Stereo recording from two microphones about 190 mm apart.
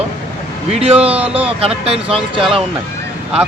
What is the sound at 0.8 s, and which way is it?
Speech, 30° right (ahead or behind).